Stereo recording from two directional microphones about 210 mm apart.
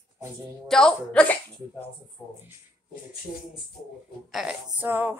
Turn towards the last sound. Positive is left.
turn(degrees=-10)  # may be behind; listen again after turning